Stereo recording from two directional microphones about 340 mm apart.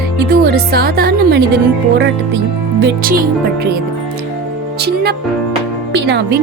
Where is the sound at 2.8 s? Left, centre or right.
Right.